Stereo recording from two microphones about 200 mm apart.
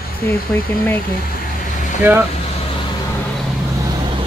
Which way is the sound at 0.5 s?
10° left (ahead or behind).